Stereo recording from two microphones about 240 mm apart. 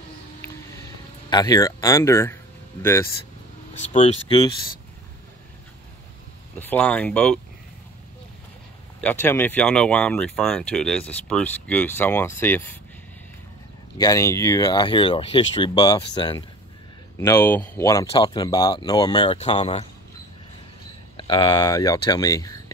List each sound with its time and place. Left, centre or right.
0.4 s a sound: centre
2.8 s speech: centre
3.8 s speech: left
6.6 s speech: centre
9.0 s speech: centre
13.9 s speech: centre
21.2 s speech: centre